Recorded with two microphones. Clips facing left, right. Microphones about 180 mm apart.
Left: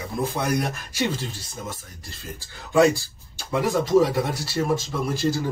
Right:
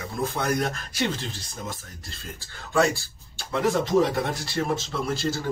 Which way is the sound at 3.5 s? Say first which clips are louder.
Left 2 dB; 10° left (ahead or behind).